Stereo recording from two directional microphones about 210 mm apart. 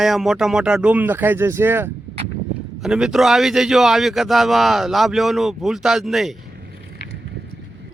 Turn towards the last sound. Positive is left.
turn(degrees=0)  # may be behind; listen again after turning